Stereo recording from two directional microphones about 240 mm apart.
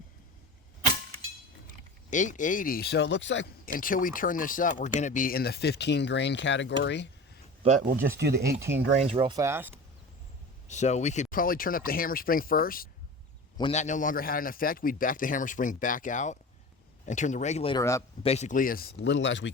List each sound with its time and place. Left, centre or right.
2.0 s speech: left
3.8 s speech: left
7.6 s speech: right
8.0 s speech: right
9.0 s speech: right
10.7 s speech: left
13.6 s speech: left
18.3 s speech: left